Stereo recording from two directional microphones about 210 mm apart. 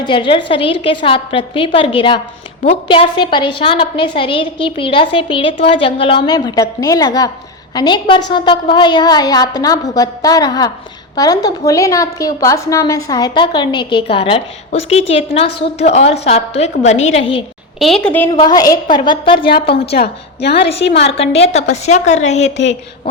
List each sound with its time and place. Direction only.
0.0 s a woman's voice: 25° left (ahead or behind)
17.7 s a woman's voice: centre (ahead or behind)
18.3 s a woman's voice: 20° left (ahead or behind)
19.9 s a woman's voice: 50° left (ahead or behind)
21.0 s a woman's voice: 30° left (ahead or behind)